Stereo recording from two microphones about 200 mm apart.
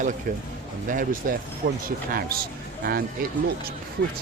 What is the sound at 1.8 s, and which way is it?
Speech, 45° right (ahead or behind).